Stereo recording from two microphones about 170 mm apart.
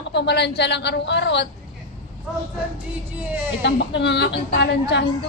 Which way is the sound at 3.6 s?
90° left.